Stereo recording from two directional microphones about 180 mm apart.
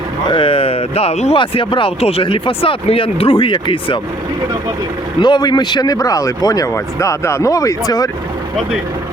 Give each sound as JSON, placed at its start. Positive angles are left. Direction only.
{"t": 0.3, "sound": "speech", "side_deg": 30}
{"t": 5.2, "sound": "speech", "side_deg": 25}